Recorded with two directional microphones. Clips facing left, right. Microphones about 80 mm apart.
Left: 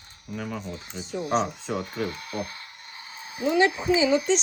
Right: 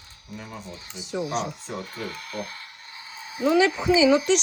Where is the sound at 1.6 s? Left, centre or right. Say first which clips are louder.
Left 4 dB; left.